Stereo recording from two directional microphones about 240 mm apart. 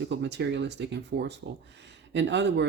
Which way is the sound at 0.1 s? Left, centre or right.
Right.